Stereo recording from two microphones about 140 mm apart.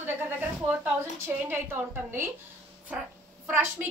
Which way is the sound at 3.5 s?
15° right (ahead or behind).